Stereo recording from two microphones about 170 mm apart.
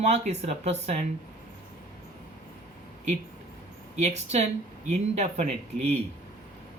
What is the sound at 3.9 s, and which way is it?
Speech, 40° right (ahead or behind).